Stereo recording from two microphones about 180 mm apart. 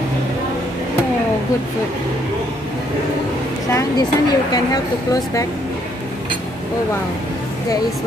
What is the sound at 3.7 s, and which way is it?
Speech, 20° left (ahead or behind).